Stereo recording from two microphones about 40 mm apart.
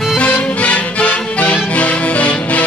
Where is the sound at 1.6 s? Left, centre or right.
Left.